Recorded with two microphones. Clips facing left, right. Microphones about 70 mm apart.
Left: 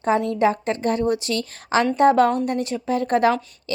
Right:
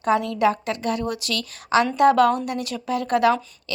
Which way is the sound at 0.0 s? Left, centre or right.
Left.